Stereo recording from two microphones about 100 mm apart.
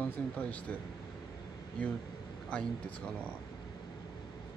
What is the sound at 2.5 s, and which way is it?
Speech, 10° left (ahead or behind).